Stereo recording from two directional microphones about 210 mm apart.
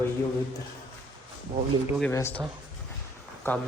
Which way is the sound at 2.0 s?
10° left (ahead or behind).